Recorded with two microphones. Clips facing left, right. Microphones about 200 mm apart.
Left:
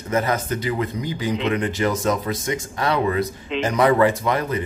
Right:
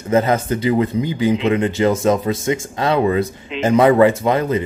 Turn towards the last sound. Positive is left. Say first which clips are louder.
# right 5 dB
turn(degrees=-25)  # may be behind; listen again after turning